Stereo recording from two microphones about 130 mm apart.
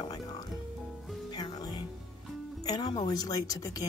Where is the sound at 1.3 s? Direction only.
30° left (ahead or behind).